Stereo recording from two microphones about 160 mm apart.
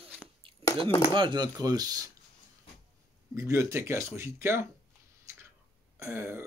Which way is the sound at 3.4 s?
20° right (ahead or behind).